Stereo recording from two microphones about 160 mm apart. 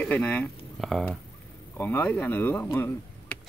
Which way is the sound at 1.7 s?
15° left (ahead or behind).